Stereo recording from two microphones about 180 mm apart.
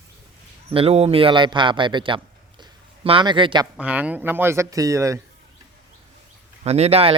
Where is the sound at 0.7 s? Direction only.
35° right (ahead or behind).